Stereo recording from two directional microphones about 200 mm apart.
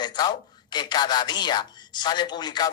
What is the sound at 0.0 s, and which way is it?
Speech, 20° left (ahead or behind).